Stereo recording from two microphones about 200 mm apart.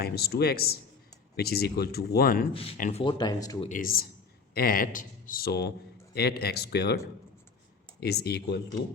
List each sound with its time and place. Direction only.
0.0 s a man's voice: 50° left (ahead or behind)
2.5 s speech: 30° left (ahead or behind)
2.7 s speech: 40° left (ahead or behind)
3.0 s speech: 25° left (ahead or behind)
3.7 s a man's voice: 45° left (ahead or behind)
8.0 s a man's voice: 55° left (ahead or behind)